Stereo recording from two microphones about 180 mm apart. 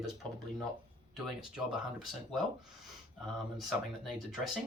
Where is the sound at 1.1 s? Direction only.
Centre (ahead or behind).